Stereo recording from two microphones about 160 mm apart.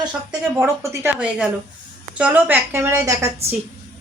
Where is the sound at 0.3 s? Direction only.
15° right (ahead or behind).